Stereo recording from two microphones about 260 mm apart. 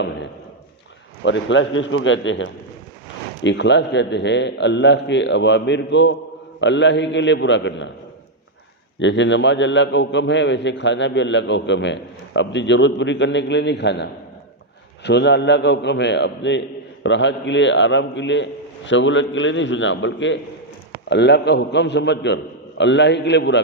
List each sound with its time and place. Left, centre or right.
1.2 s a man's voice: left
9.0 s a man's voice: left